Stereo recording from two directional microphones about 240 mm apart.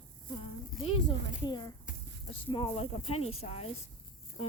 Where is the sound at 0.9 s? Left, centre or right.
Centre.